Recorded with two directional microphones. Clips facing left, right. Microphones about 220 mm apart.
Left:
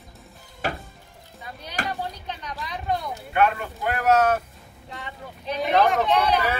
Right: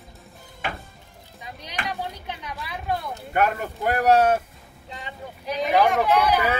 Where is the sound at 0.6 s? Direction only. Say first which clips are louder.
Left 3 dB; 40° left (ahead or behind).